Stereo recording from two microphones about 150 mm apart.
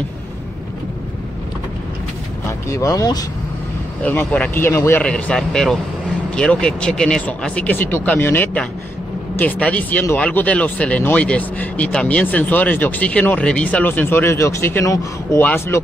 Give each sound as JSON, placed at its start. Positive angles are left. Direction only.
{"t": 2.4, "sound": "speech", "side_deg": 20}
{"t": 4.0, "sound": "speech", "side_deg": 10}
{"t": 5.0, "sound": "speech", "side_deg": 5}